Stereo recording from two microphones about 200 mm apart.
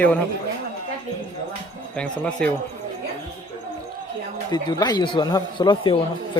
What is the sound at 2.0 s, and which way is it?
Speech, 5° left (ahead or behind).